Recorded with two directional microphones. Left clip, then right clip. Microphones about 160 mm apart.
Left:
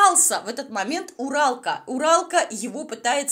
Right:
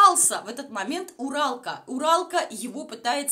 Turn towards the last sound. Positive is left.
turn(degrees=20)  # may be behind; listen again after turning